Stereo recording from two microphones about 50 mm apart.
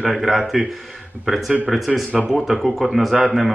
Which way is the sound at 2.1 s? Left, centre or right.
Right.